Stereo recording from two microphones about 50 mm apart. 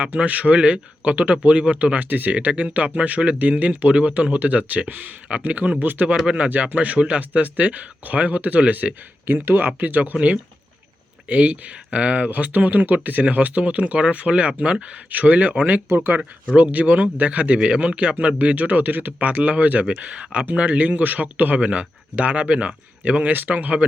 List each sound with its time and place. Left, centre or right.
0.2 s speech: right
9.2 s speech: right